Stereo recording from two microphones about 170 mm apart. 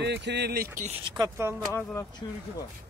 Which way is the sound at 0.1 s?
85° right.